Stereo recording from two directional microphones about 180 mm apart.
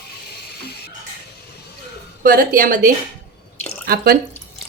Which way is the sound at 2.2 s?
50° right (ahead or behind).